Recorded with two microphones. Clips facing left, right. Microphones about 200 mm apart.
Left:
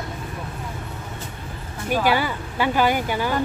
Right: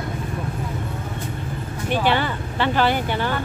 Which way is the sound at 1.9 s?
10° left (ahead or behind).